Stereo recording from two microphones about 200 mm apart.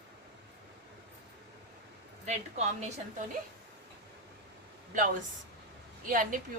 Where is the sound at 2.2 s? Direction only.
35° right (ahead or behind).